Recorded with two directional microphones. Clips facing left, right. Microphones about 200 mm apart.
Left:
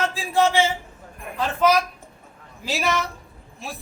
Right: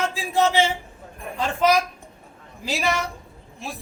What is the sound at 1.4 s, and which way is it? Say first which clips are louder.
Speech: even; 10° right (ahead or behind).